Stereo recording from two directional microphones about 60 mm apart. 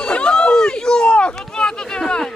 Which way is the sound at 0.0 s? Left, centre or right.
Centre.